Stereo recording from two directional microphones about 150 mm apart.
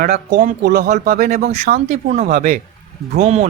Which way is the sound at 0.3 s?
60° right (ahead or behind).